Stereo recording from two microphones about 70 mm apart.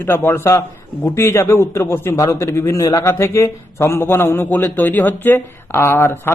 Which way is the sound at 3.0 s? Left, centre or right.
Left.